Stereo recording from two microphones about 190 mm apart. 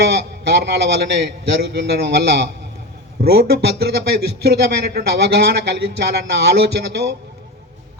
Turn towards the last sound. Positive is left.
turn(degrees=-60)  # may be behind; listen again after turning